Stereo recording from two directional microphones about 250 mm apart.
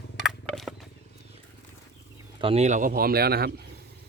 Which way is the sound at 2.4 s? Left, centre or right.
Right.